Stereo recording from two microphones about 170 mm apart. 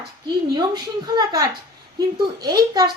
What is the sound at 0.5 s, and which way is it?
A woman's voice, 25° right (ahead or behind).